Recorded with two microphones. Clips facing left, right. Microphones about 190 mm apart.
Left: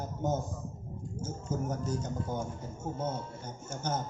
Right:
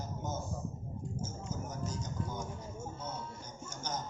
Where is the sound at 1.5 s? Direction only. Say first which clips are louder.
Left 11 dB; 60° left (ahead or behind).